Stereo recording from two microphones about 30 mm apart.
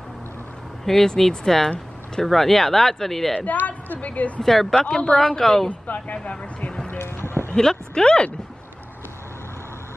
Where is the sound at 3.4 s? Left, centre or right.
Left.